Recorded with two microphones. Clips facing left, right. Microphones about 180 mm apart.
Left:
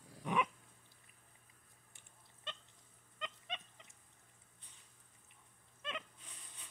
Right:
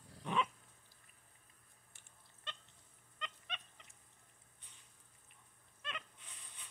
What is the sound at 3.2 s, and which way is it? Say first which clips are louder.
Pig: left 3 dB; 20° left (ahead or behind).